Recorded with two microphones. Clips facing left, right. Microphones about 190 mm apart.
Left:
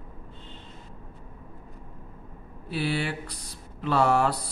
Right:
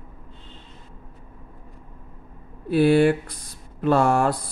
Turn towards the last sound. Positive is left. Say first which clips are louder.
# right 3 dB
turn(degrees=-50)  # may be behind; listen again after turning